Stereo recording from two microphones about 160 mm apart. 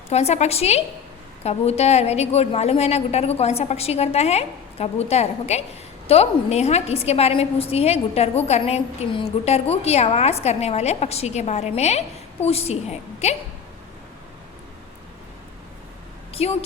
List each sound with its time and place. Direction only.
0.1 s a woman's voice: 40° left (ahead or behind)
16.3 s a woman's voice: 40° left (ahead or behind)